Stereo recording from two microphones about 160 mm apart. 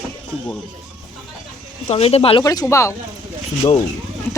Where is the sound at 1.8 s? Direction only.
40° left (ahead or behind).